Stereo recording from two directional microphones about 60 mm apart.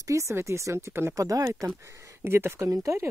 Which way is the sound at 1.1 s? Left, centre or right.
Right.